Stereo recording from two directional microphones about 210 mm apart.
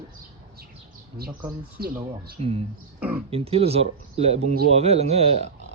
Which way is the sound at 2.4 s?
30° right (ahead or behind).